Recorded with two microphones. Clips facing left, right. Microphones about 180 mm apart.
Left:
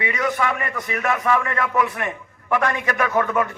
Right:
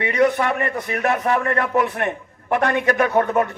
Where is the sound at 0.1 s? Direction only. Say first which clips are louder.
Right 7 dB; 35° right (ahead or behind).